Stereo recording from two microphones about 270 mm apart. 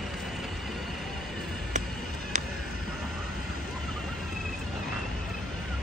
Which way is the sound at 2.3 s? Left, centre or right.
Right.